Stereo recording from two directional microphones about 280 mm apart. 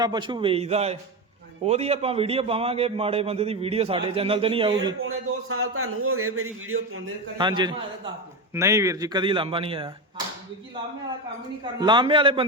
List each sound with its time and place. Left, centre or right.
0.0 s a man's voice: centre
5.0 s a man's voice: right
7.3 s speech: centre
11.6 s speech: centre